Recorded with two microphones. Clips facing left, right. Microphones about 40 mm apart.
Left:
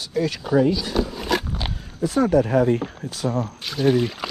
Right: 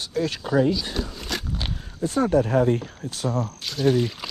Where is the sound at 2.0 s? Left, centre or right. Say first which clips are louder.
Left 2 dB; left.